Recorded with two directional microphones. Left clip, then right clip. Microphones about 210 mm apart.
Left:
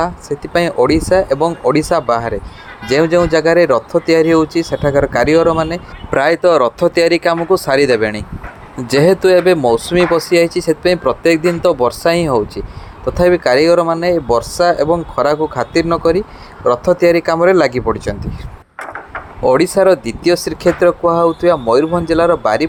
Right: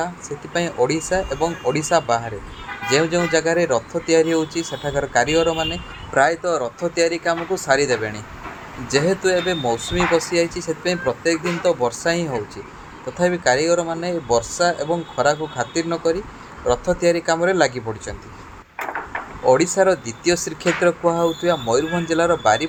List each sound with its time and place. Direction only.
0.0 s speech: 25° left (ahead or behind)
6.1 s speech: 40° left (ahead or behind)
19.5 s speech: 25° left (ahead or behind)